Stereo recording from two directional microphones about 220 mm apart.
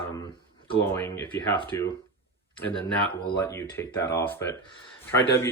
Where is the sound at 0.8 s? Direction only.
10° left (ahead or behind).